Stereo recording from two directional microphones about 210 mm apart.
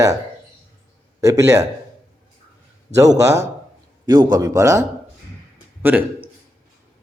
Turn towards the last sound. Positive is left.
turn(degrees=-10)  # may be behind; listen again after turning